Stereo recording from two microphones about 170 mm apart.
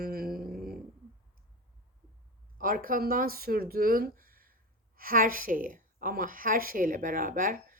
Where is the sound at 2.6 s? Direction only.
55° right (ahead or behind).